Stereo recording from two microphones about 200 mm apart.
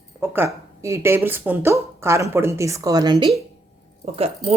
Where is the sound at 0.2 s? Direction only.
15° right (ahead or behind).